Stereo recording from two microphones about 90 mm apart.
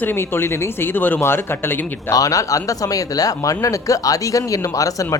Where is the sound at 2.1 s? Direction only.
40° left (ahead or behind).